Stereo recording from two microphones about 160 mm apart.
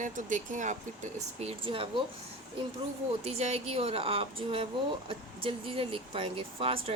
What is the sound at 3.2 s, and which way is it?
Speech, 40° right (ahead or behind).